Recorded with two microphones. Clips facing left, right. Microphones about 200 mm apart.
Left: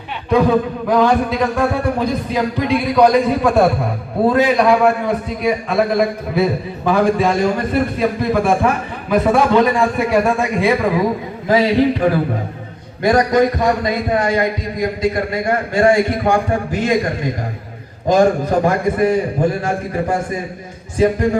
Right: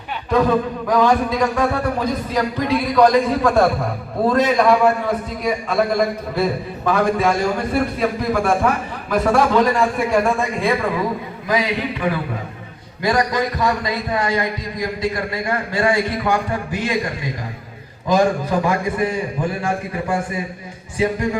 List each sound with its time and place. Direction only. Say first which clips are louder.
0.3 s a man's voice: left 3 dB; 5° left (ahead or behind)
11.4 s a man's voice: left 8 dB; 30° left (ahead or behind)
13.0 s a man's voice: left 6 dB; 50° left (ahead or behind)
18.1 s a man's voice: left 4 dB; 50° left (ahead or behind)